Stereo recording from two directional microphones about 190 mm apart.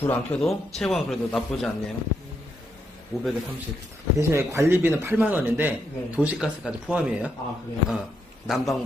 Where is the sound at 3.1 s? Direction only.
Centre (ahead or behind).